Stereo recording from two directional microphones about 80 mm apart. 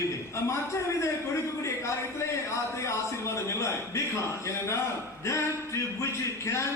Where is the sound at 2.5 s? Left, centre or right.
Left.